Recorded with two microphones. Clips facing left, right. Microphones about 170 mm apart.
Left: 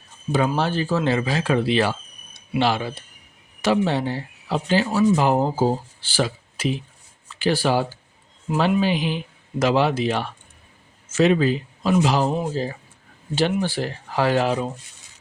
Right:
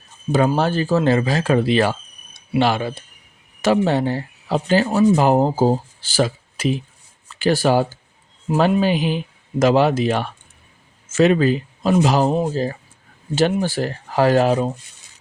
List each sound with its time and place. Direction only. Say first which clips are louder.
0.3 s speech: right 4 dB; 45° right (ahead or behind)
13.5 s speech: right 3 dB; 45° right (ahead or behind)